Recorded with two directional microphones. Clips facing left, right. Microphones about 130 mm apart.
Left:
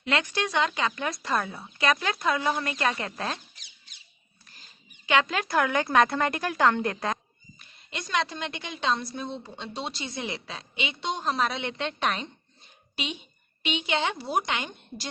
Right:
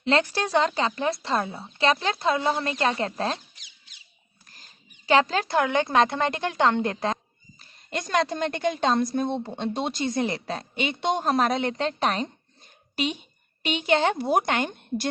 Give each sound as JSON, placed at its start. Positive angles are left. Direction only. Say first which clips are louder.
{"t": 0.0, "sound": "a woman's voice", "louder": "right 4 dB", "side_deg": -35}
{"t": 4.4, "sound": "speech", "louder": "right 1 dB", "side_deg": -45}
{"t": 7.6, "sound": "a woman's voice", "louder": "right 7 dB", "side_deg": -45}